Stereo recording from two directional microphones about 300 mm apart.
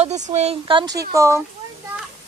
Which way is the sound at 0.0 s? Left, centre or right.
Right.